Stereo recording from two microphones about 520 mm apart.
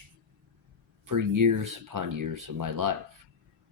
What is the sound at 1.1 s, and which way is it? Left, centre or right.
Speech, right.